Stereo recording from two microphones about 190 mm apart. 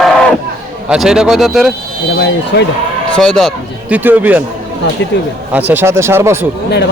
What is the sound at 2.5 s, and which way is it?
Speech, 55° left (ahead or behind).